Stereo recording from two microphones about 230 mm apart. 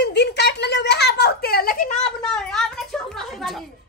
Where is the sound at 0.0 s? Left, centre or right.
Left.